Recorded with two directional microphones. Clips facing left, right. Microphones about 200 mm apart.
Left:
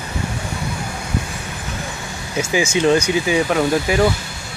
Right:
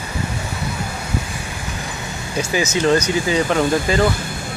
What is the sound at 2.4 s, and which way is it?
Speech, 10° left (ahead or behind).